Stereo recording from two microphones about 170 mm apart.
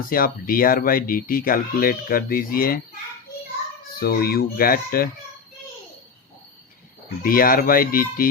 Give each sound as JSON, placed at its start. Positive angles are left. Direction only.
{"t": 0.0, "sound": "speech", "side_deg": 55}
{"t": 4.0, "sound": "speech", "side_deg": 65}
{"t": 7.2, "sound": "speech", "side_deg": 60}